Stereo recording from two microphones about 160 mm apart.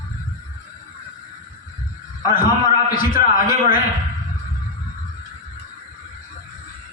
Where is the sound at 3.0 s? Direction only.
60° left (ahead or behind).